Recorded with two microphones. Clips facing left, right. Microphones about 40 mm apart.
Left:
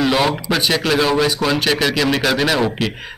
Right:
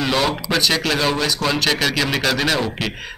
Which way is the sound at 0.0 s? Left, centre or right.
Centre.